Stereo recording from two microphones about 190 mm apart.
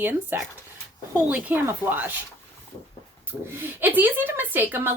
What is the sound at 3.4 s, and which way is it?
Speech, 10° right (ahead or behind).